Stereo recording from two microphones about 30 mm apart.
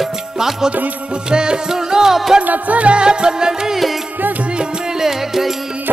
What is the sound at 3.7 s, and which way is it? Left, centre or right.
Music, centre.